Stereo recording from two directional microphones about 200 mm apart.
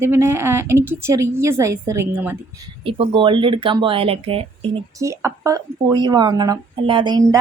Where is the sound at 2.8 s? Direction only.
30° right (ahead or behind).